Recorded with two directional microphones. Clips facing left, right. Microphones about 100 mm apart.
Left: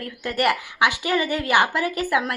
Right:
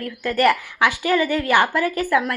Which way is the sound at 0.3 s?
20° left (ahead or behind).